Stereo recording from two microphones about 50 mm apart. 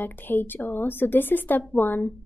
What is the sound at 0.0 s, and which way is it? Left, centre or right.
A woman's voice, left.